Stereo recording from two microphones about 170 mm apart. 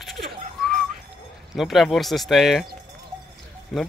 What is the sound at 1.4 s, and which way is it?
Speech, centre (ahead or behind).